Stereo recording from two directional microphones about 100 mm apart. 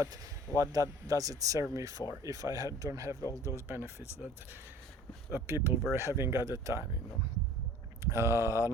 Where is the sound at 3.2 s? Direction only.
35° left (ahead or behind).